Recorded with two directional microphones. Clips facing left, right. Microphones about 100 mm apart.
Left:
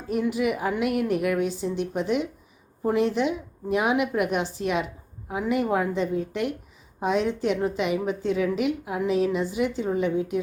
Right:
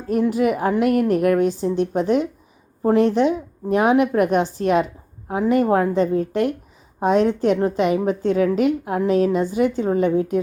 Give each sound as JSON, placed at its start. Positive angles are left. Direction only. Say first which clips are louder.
{"t": 0.1, "sound": "a woman's voice", "louder": "right 6 dB", "side_deg": -40}